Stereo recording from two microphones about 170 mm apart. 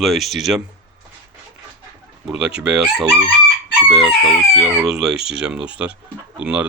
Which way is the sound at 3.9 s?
Centre (ahead or behind).